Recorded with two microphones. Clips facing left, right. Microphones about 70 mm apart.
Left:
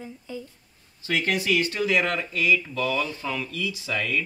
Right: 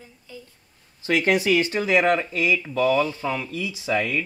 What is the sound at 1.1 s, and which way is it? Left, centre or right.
Speech, right.